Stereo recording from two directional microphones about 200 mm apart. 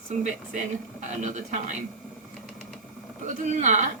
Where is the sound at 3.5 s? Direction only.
40° right (ahead or behind).